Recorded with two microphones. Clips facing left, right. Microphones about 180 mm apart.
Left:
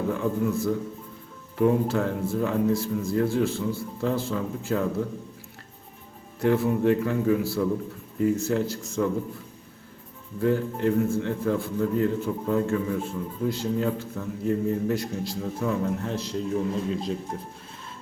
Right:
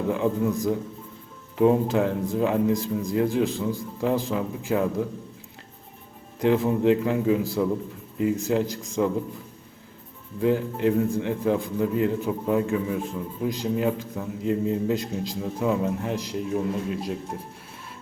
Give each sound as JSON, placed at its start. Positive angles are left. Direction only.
{"t": 0.1, "sound": "a man's voice", "side_deg": -20}
{"t": 6.4, "sound": "a man's voice", "side_deg": -20}
{"t": 10.4, "sound": "a man's voice", "side_deg": -15}